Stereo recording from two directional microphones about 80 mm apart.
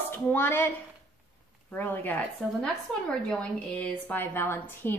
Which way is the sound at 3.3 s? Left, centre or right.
Centre.